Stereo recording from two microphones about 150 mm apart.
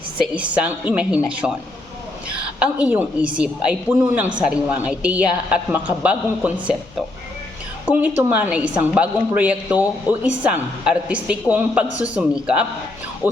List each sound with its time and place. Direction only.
0.3 s a woman's voice: 10° right (ahead or behind)
2.6 s a woman's voice: 10° right (ahead or behind)
7.9 s a woman's voice: 10° right (ahead or behind)
13.2 s a woman's voice: 15° right (ahead or behind)